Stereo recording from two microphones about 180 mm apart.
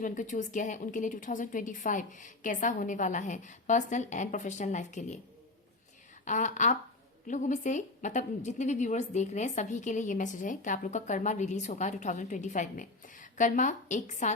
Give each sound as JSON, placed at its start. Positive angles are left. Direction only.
{"t": 0.0, "sound": "a woman's voice", "side_deg": 45}
{"t": 6.2, "sound": "a woman's voice", "side_deg": 45}